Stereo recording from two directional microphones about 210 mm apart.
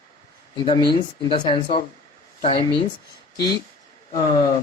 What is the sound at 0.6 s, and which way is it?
A man's voice, 20° left (ahead or behind).